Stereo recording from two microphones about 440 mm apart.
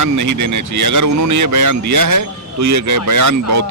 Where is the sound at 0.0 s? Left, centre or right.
Right.